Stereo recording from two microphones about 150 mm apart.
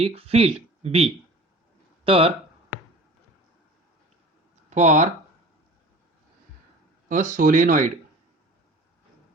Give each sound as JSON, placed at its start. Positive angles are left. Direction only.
{"t": 0.0, "sound": "speech", "side_deg": -40}
{"t": 4.7, "sound": "speech", "side_deg": -55}
{"t": 7.1, "sound": "speech", "side_deg": -60}